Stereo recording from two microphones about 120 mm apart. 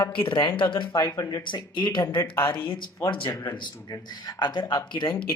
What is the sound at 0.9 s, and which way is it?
Speech, 25° left (ahead or behind).